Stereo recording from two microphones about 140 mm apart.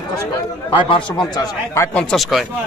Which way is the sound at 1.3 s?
20° left (ahead or behind).